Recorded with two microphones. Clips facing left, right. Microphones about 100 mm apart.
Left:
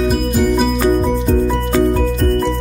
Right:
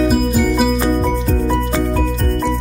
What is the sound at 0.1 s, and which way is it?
Music, 5° right (ahead or behind).